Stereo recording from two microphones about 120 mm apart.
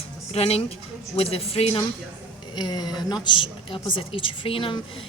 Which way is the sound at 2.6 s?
35° left (ahead or behind).